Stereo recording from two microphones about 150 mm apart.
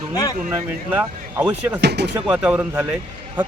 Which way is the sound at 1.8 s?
90° right.